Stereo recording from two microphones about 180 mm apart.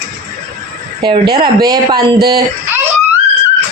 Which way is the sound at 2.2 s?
60° right (ahead or behind).